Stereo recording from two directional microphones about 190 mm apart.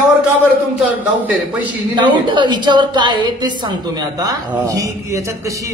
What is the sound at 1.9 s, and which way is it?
A woman's voice, 25° right (ahead or behind).